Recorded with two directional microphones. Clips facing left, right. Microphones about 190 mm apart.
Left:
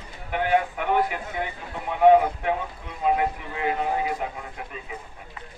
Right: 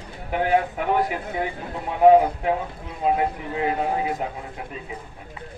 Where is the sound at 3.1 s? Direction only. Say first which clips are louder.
Right 2 dB; 30° right (ahead or behind).